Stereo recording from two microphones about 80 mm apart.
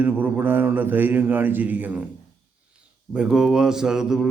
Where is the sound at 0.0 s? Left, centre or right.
Right.